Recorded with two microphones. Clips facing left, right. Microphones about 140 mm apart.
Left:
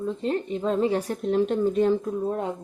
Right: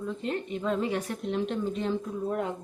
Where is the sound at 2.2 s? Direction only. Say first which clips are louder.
Left 3 dB; 30° left (ahead or behind).